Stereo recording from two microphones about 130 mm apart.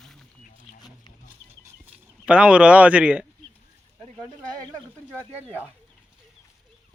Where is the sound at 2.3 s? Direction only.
10° right (ahead or behind).